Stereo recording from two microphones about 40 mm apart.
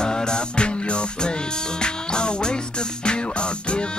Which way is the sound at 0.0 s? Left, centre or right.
Centre.